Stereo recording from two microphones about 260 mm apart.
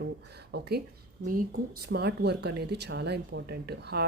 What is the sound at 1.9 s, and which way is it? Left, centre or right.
Speech, right.